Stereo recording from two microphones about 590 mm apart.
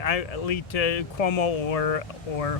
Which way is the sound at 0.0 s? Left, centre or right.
Left.